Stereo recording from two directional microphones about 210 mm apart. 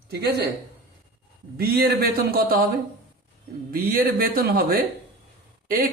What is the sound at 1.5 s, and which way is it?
Speech, 45° right (ahead or behind).